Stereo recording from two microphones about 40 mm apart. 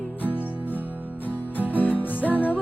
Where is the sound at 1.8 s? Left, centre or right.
Left.